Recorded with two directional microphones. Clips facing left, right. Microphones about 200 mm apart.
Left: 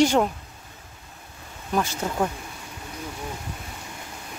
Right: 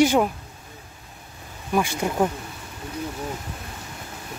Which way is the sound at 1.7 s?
10° right (ahead or behind).